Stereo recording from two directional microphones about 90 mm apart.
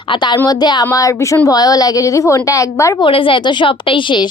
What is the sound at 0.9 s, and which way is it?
Speech, 35° left (ahead or behind).